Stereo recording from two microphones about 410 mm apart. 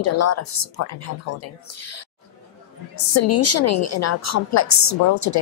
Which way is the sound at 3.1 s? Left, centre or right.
Left.